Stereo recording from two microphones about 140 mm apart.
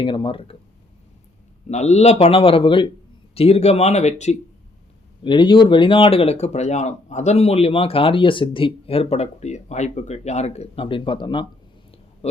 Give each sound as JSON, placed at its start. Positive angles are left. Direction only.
{"t": 0.0, "sound": "speech", "side_deg": 35}
{"t": 1.7, "sound": "speech", "side_deg": 55}
{"t": 5.2, "sound": "speech", "side_deg": 35}
{"t": 12.2, "sound": "speech", "side_deg": 45}